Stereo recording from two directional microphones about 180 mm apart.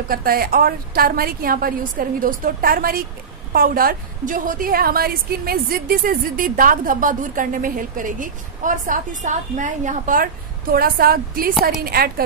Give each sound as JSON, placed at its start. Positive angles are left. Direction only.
{"t": 0.1, "sound": "a woman's voice", "side_deg": -55}